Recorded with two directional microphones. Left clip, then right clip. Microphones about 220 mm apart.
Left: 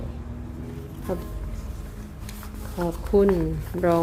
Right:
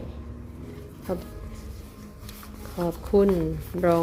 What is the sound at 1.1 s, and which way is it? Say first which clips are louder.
Speech: left 1 dB; 15° right (ahead or behind).